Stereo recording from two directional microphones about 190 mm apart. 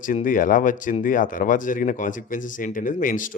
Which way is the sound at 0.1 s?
45° left (ahead or behind).